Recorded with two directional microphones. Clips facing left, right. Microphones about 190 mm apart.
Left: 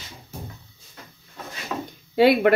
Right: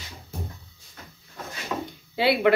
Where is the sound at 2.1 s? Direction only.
50° left (ahead or behind).